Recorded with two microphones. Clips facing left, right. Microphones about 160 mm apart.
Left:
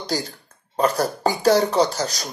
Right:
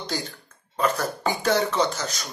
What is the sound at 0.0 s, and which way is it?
Speech, 35° left (ahead or behind).